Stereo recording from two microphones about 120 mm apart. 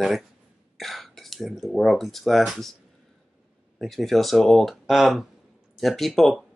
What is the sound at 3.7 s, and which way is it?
Speech, centre (ahead or behind).